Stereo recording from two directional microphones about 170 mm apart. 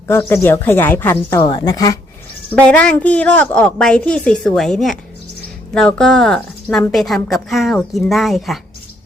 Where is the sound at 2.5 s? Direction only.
5° left (ahead or behind).